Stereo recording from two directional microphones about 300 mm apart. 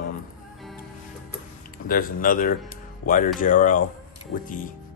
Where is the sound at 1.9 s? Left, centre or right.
Left.